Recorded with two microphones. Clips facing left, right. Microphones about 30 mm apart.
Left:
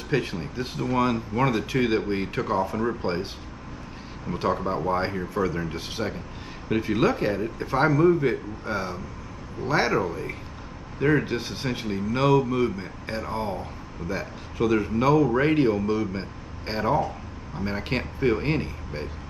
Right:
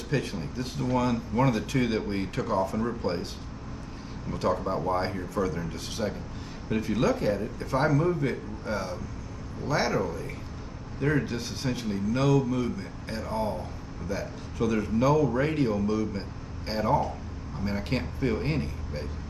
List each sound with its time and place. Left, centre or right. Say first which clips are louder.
0.1 s a man's voice: left 4 dB; left
4.3 s a man's voice: left 2 dB; left
5.3 s a man's voice: left 3 dB; left